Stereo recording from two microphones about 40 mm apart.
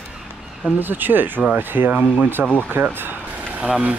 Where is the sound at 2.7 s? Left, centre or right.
Right.